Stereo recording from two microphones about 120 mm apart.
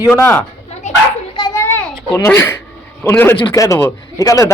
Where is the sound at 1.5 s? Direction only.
20° left (ahead or behind).